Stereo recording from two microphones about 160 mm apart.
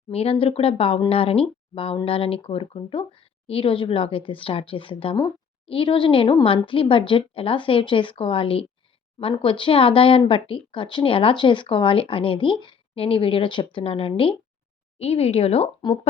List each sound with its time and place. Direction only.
0.1 s speech: 40° left (ahead or behind)